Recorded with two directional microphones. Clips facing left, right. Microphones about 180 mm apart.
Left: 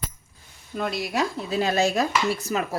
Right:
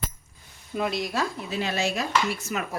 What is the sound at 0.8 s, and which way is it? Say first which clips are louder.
Speech: even; centre (ahead or behind).